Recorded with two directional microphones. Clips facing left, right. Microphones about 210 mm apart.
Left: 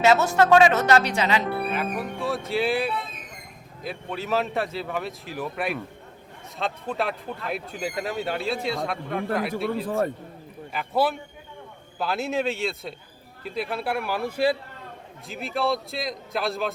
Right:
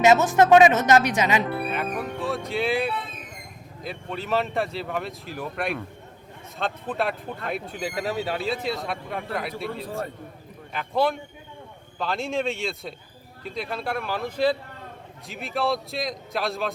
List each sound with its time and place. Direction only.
0.0 s a woman's voice: 20° right (ahead or behind)
1.7 s speech: centre (ahead or behind)
9.8 s a man's voice: 50° left (ahead or behind)
10.7 s speech: 5° left (ahead or behind)